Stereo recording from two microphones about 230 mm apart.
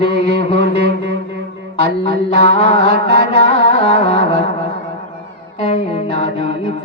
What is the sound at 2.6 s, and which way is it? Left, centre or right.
Music, left.